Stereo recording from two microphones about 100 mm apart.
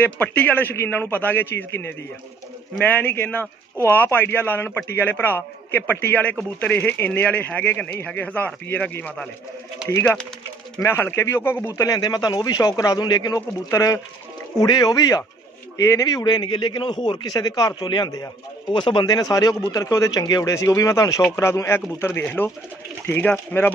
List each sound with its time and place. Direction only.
0.0 s a man's voice: 15° left (ahead or behind)
10.8 s a man's voice: 25° left (ahead or behind)
11.6 s a man's voice: 35° left (ahead or behind)
18.7 s a man's voice: 55° left (ahead or behind); by 23.7 s 20° left (ahead or behind)